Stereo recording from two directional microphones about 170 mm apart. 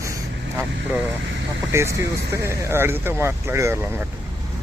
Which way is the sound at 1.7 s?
15° right (ahead or behind).